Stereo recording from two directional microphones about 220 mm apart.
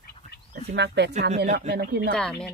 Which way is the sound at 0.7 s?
50° right (ahead or behind).